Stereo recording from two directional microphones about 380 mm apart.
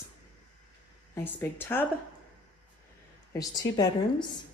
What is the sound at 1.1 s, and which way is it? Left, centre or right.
Speech, centre.